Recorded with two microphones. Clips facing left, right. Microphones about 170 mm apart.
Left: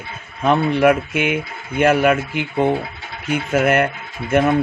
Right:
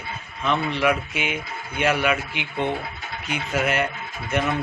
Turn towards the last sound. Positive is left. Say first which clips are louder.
# left 8 dB
turn(degrees=50)  # may be behind; listen again after turning